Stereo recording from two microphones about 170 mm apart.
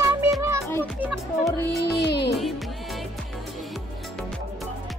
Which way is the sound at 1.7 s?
80° left.